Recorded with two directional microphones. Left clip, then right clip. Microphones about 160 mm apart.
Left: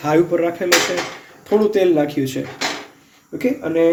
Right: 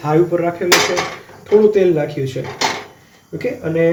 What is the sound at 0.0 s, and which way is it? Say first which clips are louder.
Speech: right 1 dB; 60° left (ahead or behind).